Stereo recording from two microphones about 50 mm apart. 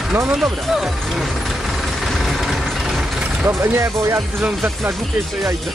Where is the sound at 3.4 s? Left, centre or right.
Right.